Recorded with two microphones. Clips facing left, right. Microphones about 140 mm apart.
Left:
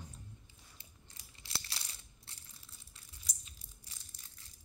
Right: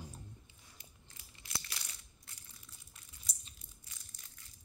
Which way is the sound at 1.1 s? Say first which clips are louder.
Right 1 dB; 30° left (ahead or behind).